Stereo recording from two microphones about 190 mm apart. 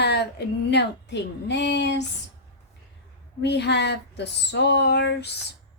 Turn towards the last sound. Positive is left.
turn(degrees=60)  # may be behind; listen again after turning